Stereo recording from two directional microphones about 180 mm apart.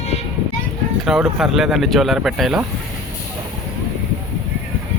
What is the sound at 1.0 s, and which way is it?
Speech, centre (ahead or behind).